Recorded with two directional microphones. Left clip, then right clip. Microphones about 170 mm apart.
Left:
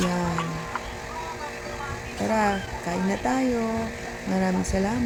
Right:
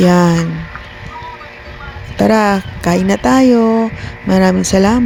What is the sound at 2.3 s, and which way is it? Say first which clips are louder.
Speech: right 10 dB; 55° right (ahead or behind).